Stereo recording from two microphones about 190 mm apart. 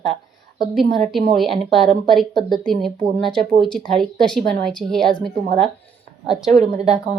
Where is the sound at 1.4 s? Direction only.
Centre (ahead or behind).